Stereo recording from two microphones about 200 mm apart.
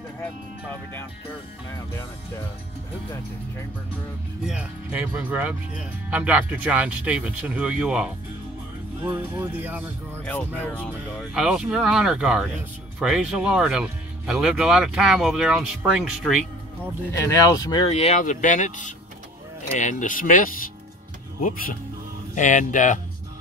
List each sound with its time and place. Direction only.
4.5 s speech: 5° right (ahead or behind)
10.2 s speech: 5° left (ahead or behind)
11.1 s speech: 5° right (ahead or behind)
17.1 s speech: 15° left (ahead or behind)
17.8 s speech: 30° left (ahead or behind)